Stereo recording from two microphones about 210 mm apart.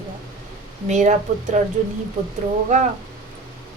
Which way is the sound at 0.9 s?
35° right (ahead or behind).